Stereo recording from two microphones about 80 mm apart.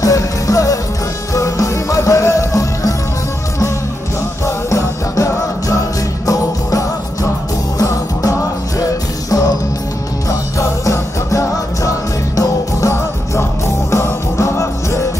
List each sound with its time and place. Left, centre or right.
0.0 s music: left
4.5 s music: left
10.6 s music: left